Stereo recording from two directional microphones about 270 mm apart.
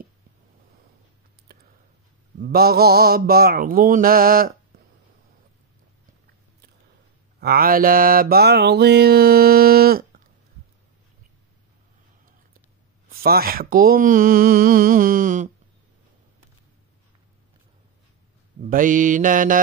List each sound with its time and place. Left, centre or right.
2.4 s mantra: right
7.3 s mantra: right
13.1 s mantra: right
18.6 s mantra: right